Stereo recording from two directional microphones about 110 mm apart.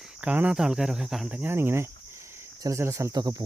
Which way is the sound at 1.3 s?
15° right (ahead or behind).